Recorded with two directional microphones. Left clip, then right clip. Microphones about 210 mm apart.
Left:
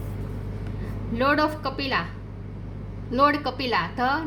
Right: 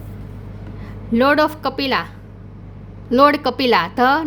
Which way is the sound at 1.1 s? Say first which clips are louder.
Right 7 dB; 50° right (ahead or behind).